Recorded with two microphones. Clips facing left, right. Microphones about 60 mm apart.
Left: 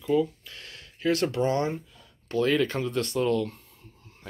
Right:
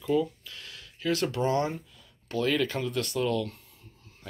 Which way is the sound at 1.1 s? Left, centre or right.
Left.